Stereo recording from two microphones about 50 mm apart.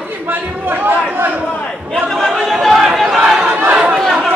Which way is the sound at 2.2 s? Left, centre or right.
Centre.